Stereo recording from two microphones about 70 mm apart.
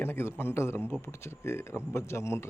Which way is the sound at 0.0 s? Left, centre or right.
Left.